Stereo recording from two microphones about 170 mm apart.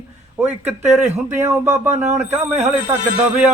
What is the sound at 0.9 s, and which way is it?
Speech, 5° right (ahead or behind).